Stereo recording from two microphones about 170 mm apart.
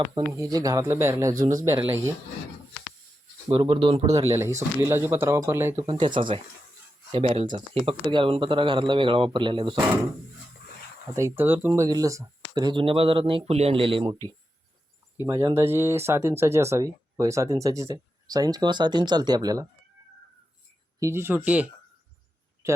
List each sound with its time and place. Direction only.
0.1 s speech: 15° right (ahead or behind)
3.5 s speech: 30° right (ahead or behind)
4.3 s speech: 15° right (ahead or behind)
5.7 s speech: 30° right (ahead or behind)
11.1 s speech: 15° right (ahead or behind)
15.3 s speech: 15° right (ahead or behind)
21.0 s speech: 15° right (ahead or behind)